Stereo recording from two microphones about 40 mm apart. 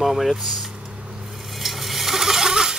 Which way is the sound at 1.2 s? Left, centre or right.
Centre.